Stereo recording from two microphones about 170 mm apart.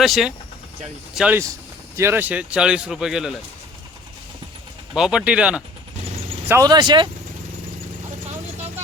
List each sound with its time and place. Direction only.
0.0 s speech: centre (ahead or behind)
4.9 s speech: 5° right (ahead or behind)
6.5 s speech: 20° right (ahead or behind)